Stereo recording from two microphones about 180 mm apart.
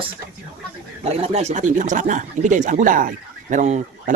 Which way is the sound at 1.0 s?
35° right (ahead or behind).